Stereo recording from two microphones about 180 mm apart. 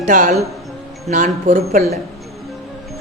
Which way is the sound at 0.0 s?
45° right (ahead or behind).